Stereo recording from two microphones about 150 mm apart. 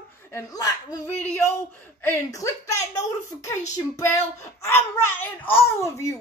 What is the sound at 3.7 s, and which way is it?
A child's voice, 20° left (ahead or behind).